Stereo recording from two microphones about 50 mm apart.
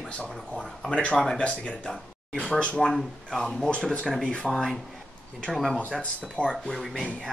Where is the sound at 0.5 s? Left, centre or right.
Centre.